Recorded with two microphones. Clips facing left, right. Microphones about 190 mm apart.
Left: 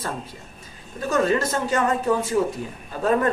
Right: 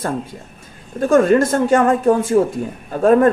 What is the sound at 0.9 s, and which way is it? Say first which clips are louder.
Speech: right 9 dB; 50° right (ahead or behind).